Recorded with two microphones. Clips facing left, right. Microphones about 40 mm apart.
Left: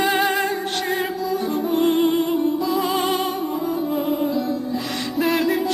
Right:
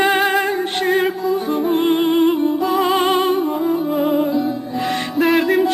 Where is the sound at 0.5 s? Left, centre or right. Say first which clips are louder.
Right 4 dB; right.